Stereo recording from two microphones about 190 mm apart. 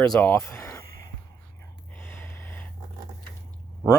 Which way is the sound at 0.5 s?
15° left (ahead or behind).